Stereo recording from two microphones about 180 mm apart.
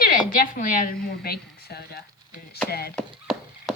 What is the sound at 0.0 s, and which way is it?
A woman's voice, 50° left (ahead or behind).